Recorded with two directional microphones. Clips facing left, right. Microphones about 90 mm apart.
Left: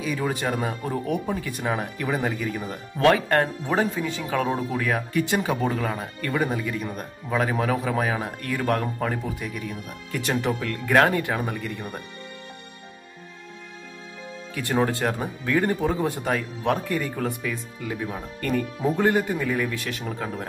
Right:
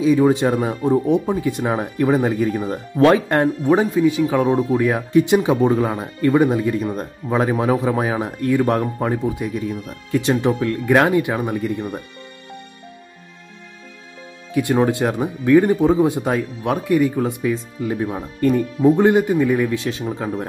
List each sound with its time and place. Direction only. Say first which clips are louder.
0.0 s speech: right 11 dB; 25° right (ahead or behind)
14.5 s speech: right 7 dB; 15° right (ahead or behind)